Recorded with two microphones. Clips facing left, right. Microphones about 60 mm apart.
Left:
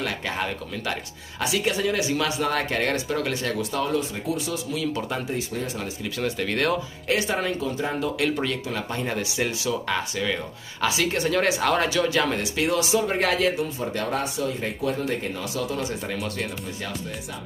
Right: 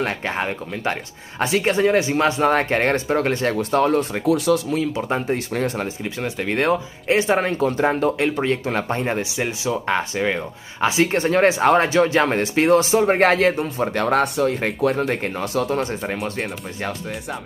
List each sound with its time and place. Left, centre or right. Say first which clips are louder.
0.0 s speech: right 4 dB; right
6.0 s speech: right 2 dB; right
8.2 s speech: right 5 dB; right
8.6 s speech: right 6 dB; right